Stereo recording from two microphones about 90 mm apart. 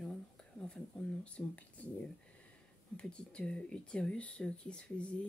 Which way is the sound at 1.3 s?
15° left (ahead or behind).